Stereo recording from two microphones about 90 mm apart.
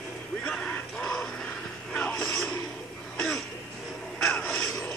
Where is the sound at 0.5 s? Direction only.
10° left (ahead or behind).